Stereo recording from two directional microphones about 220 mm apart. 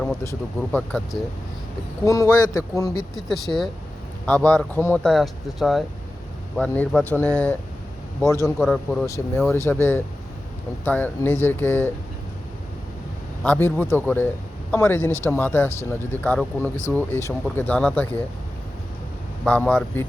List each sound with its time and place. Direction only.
0.3 s speech: 5° left (ahead or behind)
2.0 s speech: 15° left (ahead or behind)
3.2 s speech: centre (ahead or behind)
13.4 s speech: 10° left (ahead or behind)
19.5 s speech: 5° left (ahead or behind)